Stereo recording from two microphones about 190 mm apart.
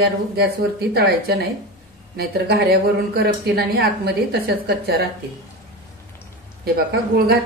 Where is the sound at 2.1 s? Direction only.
55° right (ahead or behind).